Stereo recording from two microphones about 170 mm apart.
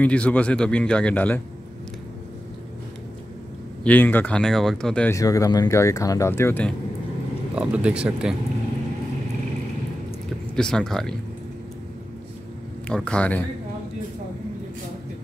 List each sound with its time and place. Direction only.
0.0 s speech: 10° left (ahead or behind)
3.8 s speech: 10° left (ahead or behind)
5.1 s speech: 20° left (ahead or behind)
7.5 s speech: 5° right (ahead or behind)
10.5 s speech: 5° left (ahead or behind)
12.8 s speech: 5° left (ahead or behind)